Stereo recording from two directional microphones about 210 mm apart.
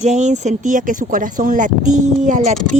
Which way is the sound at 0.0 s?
35° right (ahead or behind).